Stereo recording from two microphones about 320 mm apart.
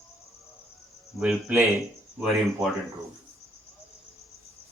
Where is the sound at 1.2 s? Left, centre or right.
Centre.